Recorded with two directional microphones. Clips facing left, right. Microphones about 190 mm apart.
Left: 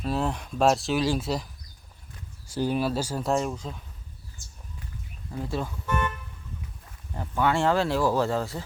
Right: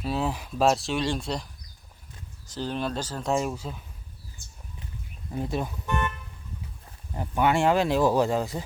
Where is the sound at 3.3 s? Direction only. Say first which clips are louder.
Right 2 dB; 5° right (ahead or behind).